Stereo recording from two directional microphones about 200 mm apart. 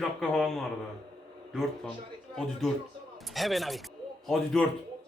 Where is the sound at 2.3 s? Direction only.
Centre (ahead or behind).